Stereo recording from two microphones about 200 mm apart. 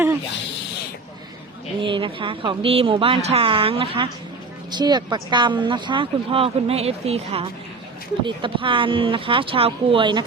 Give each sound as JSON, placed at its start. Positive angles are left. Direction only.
{"t": 1.8, "sound": "speech", "side_deg": -25}